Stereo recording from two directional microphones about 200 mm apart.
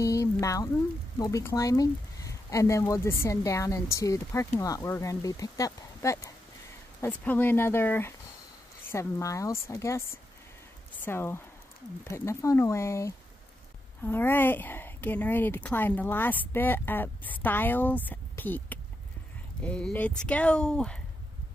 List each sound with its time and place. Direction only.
0.0 s a sound: 15° left (ahead or behind)
1.1 s speech: 15° left (ahead or behind)
11.1 s speech: 10° left (ahead or behind)